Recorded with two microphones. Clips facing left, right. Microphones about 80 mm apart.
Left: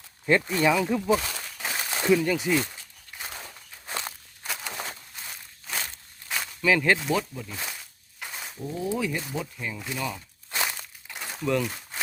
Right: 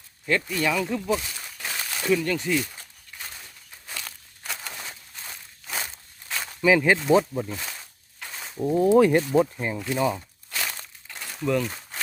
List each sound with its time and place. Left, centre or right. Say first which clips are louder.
0.3 s speech: left 2 dB; left
0.6 s speech: left 2 dB; centre
1.6 s a sound: left 2 dB; centre
3.8 s walk: left 4 dB; left
4.4 s a sound: left 1 dB; centre
5.3 s walk: right 1 dB; centre
6.6 s speech: right 3 dB; centre
7.1 s speech: right 8 dB; right
8.2 s a sound: left 1 dB; centre
8.5 s speech: right 12 dB; right
9.3 s speech: right 11 dB; right
9.9 s speech: right 9 dB; right
10.5 s crumpling: left 2 dB; centre
11.3 s a sound: right 2 dB; centre